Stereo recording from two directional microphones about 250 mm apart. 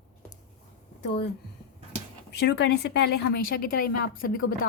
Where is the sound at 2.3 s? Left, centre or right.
Left.